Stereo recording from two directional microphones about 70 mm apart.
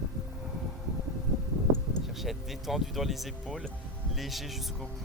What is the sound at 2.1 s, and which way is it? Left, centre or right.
Speech, centre.